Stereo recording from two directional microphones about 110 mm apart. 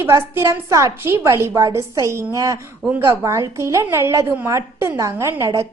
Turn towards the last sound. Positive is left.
turn(degrees=-30)  # may be behind; listen again after turning